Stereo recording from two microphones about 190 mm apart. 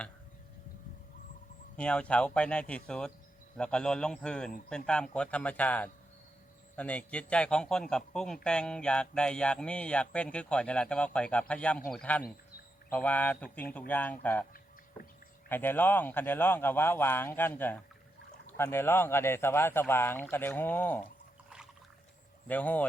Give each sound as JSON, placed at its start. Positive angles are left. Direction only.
{"t": 1.7, "sound": "a man's voice", "side_deg": 5}
{"t": 15.4, "sound": "a man's voice", "side_deg": 10}
{"t": 22.4, "sound": "a man's voice", "side_deg": 10}